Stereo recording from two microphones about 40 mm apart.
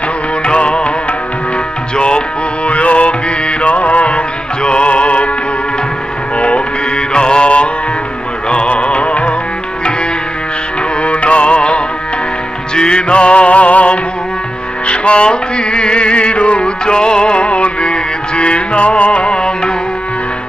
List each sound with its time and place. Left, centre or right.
0.4 s music: left
2.0 s music: left
6.3 s music: left
11.0 s music: left